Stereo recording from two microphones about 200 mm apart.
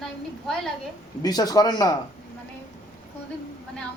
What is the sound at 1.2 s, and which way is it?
Speech, 20° left (ahead or behind).